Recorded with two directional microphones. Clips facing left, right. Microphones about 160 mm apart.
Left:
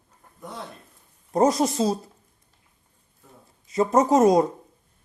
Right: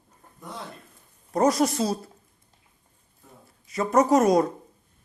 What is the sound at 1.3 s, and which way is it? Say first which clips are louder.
Speech: left 1 dB; 25° left (ahead or behind).